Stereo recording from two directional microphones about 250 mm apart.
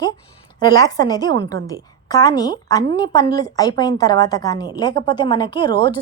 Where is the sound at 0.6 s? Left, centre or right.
Centre.